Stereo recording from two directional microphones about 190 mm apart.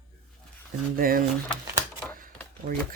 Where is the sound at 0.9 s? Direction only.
50° right (ahead or behind).